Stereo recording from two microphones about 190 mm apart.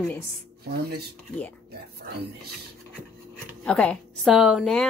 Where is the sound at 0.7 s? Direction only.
55° right (ahead or behind).